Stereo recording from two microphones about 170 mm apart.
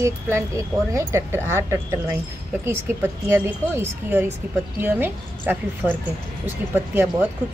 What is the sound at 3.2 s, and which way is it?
A woman's voice, 15° right (ahead or behind).